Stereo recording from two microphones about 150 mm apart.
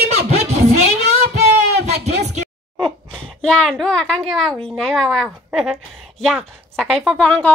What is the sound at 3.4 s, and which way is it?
A woman's voice, 5° left (ahead or behind).